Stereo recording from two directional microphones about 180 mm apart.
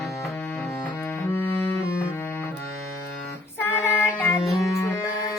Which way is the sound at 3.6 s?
10° left (ahead or behind).